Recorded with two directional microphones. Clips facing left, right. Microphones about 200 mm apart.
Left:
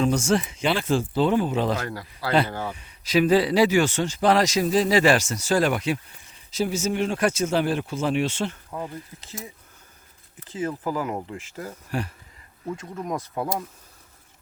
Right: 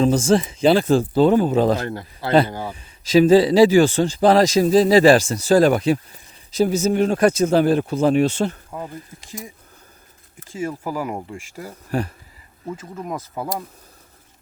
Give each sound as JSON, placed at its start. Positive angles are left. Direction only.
{"t": 0.0, "sound": "speech", "side_deg": -35}
{"t": 1.9, "sound": "speech", "side_deg": -25}
{"t": 2.5, "sound": "speech", "side_deg": -15}
{"t": 3.1, "sound": "speech", "side_deg": -30}
{"t": 8.7, "sound": "speech", "side_deg": -5}
{"t": 10.5, "sound": "speech", "side_deg": -10}
{"t": 11.9, "sound": "speech", "side_deg": -40}
{"t": 12.7, "sound": "speech", "side_deg": -5}